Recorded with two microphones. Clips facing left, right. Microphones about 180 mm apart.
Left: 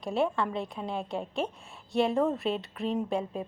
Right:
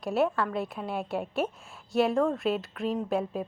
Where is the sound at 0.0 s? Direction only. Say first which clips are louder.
Right 2 dB; 5° right (ahead or behind).